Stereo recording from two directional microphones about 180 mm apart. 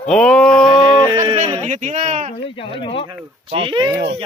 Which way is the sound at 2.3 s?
30° left (ahead or behind).